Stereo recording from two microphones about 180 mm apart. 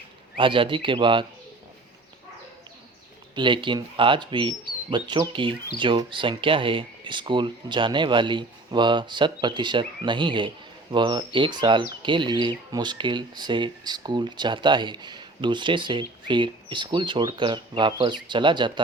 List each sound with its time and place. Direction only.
0.3 s speech: 30° right (ahead or behind)
3.3 s speech: 25° right (ahead or behind)